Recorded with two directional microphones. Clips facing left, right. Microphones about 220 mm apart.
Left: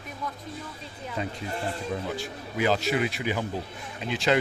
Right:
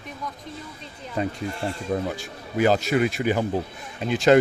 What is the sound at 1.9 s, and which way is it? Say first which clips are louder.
Speech: right 4 dB; 50° right (ahead or behind).